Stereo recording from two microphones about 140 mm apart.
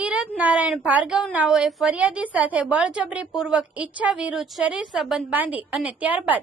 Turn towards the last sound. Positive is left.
turn(degrees=-10)  # may be behind; listen again after turning